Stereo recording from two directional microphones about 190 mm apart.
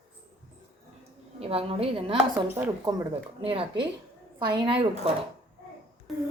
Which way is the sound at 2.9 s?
15° right (ahead or behind).